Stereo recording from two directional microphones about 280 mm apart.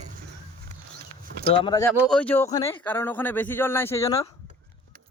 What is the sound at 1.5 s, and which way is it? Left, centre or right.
A man's voice, centre.